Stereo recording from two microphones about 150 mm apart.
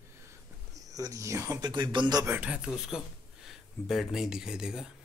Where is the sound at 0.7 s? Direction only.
25° right (ahead or behind).